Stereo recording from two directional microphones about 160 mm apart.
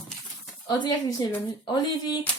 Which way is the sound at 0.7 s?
25° left (ahead or behind).